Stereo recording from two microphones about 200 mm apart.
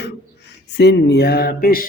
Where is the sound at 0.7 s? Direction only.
55° left (ahead or behind).